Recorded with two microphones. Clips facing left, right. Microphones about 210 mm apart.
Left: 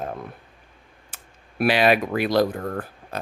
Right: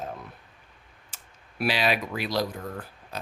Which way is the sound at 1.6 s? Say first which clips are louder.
Left 7 dB; 55° left (ahead or behind).